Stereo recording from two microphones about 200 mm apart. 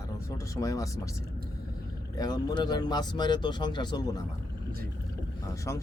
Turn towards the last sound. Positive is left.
turn(degrees=10)  # may be behind; listen again after turning